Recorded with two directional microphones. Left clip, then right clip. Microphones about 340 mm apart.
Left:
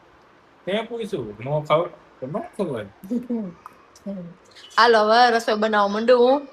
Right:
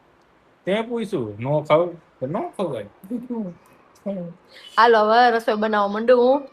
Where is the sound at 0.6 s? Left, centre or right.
Right.